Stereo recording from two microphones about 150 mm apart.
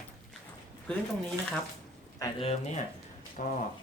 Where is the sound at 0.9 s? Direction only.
10° left (ahead or behind).